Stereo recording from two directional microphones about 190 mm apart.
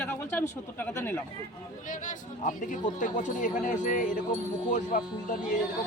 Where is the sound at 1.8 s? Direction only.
40° left (ahead or behind).